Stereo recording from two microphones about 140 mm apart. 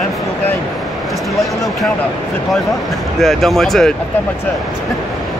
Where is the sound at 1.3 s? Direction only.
Centre (ahead or behind).